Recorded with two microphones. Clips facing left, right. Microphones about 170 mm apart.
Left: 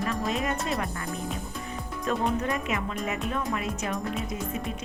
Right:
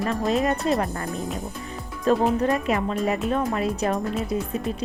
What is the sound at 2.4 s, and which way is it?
Speech, 35° right (ahead or behind).